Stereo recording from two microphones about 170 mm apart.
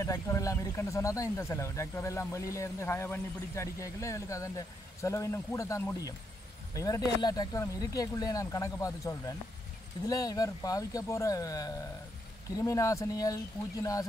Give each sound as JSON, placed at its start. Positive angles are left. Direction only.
{"t": 0.0, "sound": "speech", "side_deg": 20}